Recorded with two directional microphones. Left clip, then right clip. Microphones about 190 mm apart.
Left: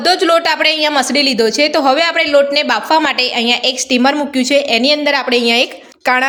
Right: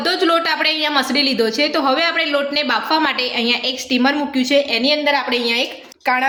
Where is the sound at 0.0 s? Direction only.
55° left (ahead or behind).